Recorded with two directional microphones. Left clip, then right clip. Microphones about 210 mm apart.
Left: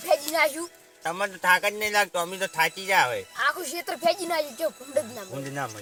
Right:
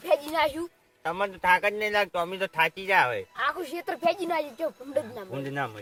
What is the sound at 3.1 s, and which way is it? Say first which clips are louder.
Speech: left 2 dB; 30° right (ahead or behind).